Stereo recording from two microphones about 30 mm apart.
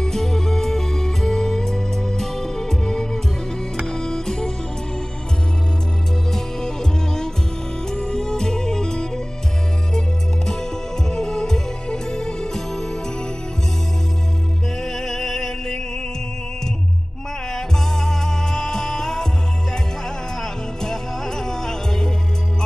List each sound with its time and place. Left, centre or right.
0.0 s music: centre
6.3 s music: centre
14.8 s music: centre
17.6 s music: centre
20.8 s music: centre